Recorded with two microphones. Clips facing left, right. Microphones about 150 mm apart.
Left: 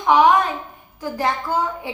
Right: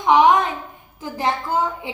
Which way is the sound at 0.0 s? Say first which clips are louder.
Even; 20° right (ahead or behind).